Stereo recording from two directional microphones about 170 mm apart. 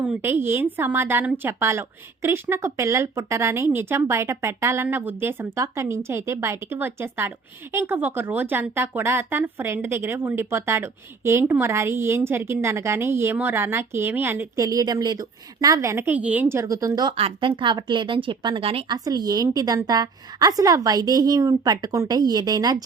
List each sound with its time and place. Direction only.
0.0 s a woman's voice: 10° right (ahead or behind); by 18.9 s 35° right (ahead or behind)
18.9 s a woman's voice: 20° right (ahead or behind)